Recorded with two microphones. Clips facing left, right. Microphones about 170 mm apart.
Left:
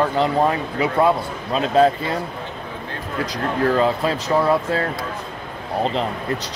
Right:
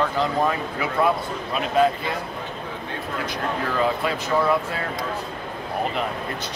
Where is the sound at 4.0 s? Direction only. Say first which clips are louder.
Left 3 dB; 35° left (ahead or behind).